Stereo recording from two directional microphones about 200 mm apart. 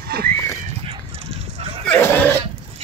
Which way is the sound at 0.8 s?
30° right (ahead or behind).